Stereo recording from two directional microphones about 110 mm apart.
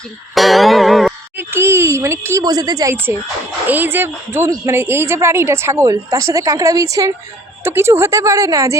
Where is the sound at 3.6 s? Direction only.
15° right (ahead or behind).